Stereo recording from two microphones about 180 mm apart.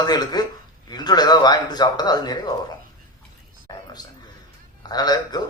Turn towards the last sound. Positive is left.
turn(degrees=20)  # may be behind; listen again after turning